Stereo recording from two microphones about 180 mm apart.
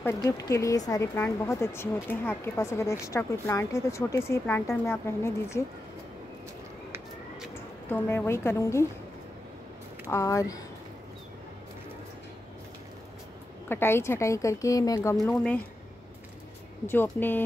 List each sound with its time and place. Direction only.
0.0 s speech: 15° left (ahead or behind)
7.9 s speech: 10° left (ahead or behind)
10.0 s speech: 20° left (ahead or behind)
13.7 s speech: 10° left (ahead or behind)
15.2 s speech: 5° left (ahead or behind)
16.8 s speech: 10° left (ahead or behind)